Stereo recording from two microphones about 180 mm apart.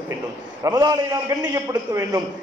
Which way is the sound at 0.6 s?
20° right (ahead or behind).